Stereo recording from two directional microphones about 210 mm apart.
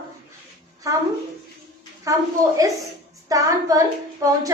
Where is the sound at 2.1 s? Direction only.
15° right (ahead or behind).